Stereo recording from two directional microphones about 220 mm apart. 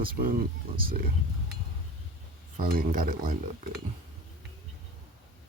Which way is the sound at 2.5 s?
40° right (ahead or behind).